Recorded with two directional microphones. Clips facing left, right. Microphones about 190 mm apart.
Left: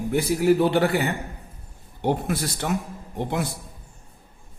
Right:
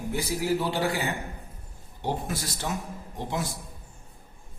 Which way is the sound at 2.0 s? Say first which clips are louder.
Left 7 dB; 60° left (ahead or behind).